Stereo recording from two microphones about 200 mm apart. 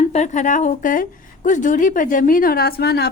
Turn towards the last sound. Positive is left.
turn(degrees=55)  # may be behind; listen again after turning